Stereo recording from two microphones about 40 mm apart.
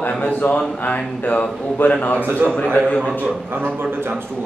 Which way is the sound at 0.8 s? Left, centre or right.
Left.